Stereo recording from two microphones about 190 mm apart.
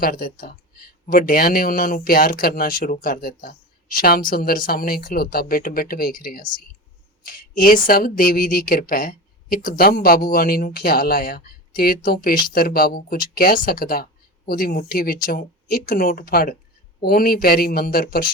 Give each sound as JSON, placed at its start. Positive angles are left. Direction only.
{"t": 0.0, "sound": "speech", "side_deg": 45}